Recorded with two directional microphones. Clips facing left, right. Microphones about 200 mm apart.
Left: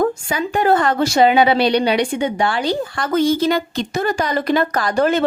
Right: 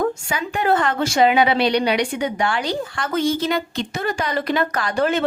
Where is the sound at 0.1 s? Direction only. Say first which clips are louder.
Left 4 dB; 35° left (ahead or behind).